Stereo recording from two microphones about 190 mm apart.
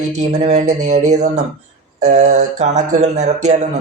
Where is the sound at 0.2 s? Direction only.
35° right (ahead or behind).